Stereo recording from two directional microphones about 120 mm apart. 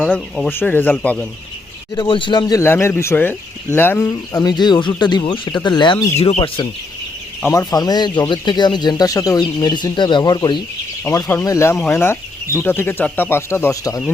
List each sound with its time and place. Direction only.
0.5 s speech: 15° left (ahead or behind)
2.0 s speech: 45° left (ahead or behind)
2.5 s speech: 20° left (ahead or behind)
4.1 s speech: 30° left (ahead or behind)
6.1 s speech: 60° left (ahead or behind)
7.5 s speech: 35° left (ahead or behind)
11.0 s speech: 25° left (ahead or behind)